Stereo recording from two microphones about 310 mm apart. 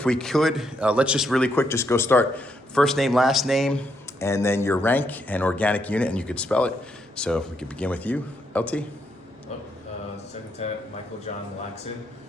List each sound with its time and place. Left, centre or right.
0.0 s speech: centre
11.3 s speech: left